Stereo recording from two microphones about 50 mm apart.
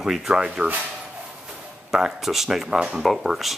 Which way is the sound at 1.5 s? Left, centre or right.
Centre.